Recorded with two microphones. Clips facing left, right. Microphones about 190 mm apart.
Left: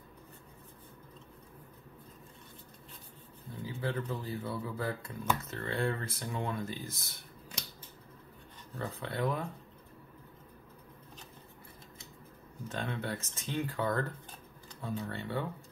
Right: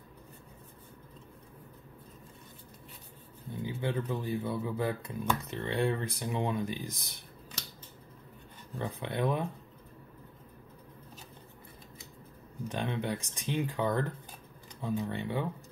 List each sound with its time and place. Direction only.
3.6 s speech: 20° right (ahead or behind)
8.7 s speech: 20° right (ahead or behind)
12.6 s speech: 15° right (ahead or behind)